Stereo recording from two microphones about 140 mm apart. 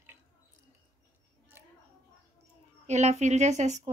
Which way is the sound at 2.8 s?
55° right (ahead or behind).